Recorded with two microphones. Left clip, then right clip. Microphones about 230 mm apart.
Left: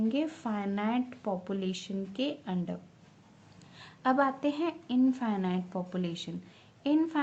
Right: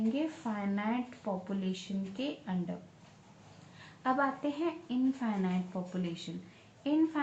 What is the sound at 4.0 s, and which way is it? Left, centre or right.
A woman's voice, left.